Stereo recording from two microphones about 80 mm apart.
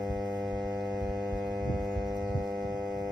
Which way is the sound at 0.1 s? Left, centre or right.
Right.